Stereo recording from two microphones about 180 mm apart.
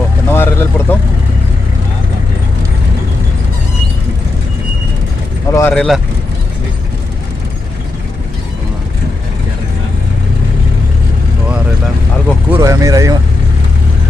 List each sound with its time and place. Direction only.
0.3 s vehicle: 10° left (ahead or behind)
5.5 s speech: 10° left (ahead or behind)
12.4 s a sound: 15° right (ahead or behind)